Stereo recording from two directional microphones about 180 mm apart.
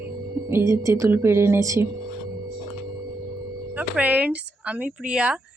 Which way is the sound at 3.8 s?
10° right (ahead or behind).